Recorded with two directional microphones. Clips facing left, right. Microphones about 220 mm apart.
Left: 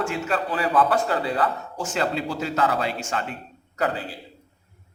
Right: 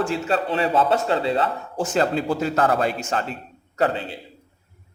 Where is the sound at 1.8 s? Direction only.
40° right (ahead or behind).